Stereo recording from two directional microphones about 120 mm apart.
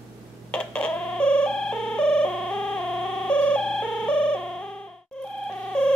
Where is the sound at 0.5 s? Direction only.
10° left (ahead or behind).